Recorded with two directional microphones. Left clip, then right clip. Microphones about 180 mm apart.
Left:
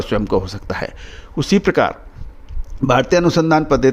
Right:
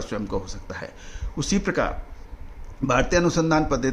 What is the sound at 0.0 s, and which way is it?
A man's voice, 45° left (ahead or behind).